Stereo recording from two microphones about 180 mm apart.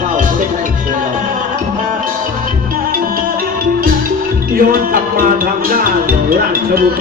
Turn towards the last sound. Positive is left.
turn(degrees=-55)  # may be behind; listen again after turning